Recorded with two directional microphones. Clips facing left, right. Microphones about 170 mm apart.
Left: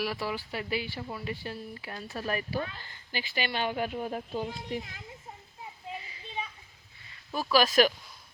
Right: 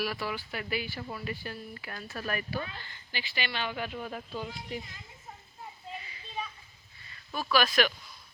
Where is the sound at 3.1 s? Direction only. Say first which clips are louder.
Left 4 dB; 45° left (ahead or behind).